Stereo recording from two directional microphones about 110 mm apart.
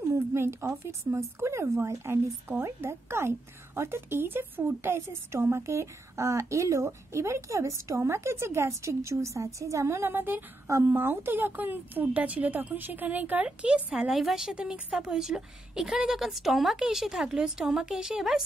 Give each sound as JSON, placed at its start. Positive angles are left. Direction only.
{"t": 0.1, "sound": "a woman's voice", "side_deg": -25}